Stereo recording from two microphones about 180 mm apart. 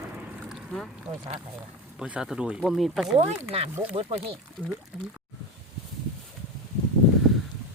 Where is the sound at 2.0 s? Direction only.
5° right (ahead or behind).